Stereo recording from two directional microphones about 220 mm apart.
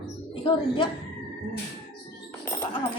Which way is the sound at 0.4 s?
20° left (ahead or behind).